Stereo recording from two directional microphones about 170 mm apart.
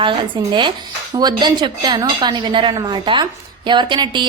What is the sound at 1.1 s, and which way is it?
Speech, 25° right (ahead or behind).